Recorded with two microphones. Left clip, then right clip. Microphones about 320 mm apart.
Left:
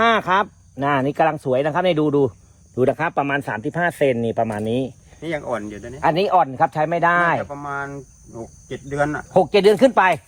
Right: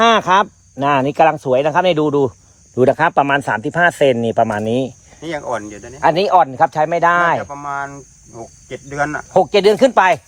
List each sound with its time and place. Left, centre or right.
0.0 s speech: right